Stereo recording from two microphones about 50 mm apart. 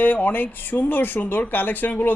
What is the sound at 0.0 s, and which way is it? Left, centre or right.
Speech, left.